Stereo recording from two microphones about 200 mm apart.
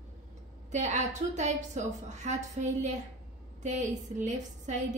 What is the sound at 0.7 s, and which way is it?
A woman's voice, 35° right (ahead or behind).